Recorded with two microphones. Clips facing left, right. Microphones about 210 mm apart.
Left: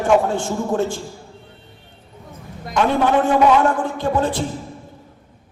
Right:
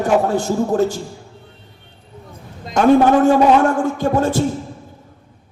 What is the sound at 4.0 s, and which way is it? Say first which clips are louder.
Vocal music: right 3 dB; 45° right (ahead or behind).